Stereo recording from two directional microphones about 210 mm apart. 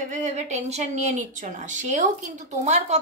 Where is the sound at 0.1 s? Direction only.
35° right (ahead or behind).